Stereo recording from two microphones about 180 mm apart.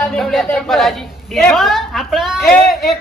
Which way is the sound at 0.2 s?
Centre (ahead or behind).